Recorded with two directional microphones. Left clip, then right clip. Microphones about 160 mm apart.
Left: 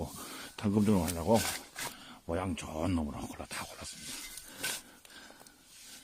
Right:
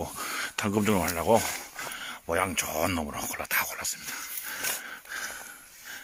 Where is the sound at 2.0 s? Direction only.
5° right (ahead or behind).